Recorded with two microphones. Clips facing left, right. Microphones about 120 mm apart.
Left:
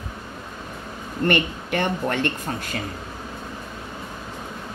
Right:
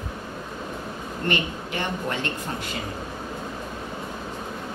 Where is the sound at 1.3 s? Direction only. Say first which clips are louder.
Left 5 dB; 60° left (ahead or behind).